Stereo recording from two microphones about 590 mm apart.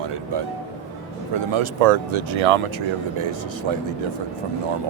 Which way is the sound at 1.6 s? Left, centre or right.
Right.